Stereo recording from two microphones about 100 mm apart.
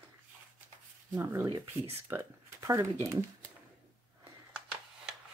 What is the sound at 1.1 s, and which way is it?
Speech, 25° right (ahead or behind).